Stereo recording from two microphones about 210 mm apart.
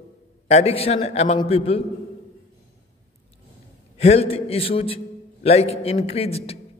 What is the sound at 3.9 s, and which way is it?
A man's voice, 30° left (ahead or behind).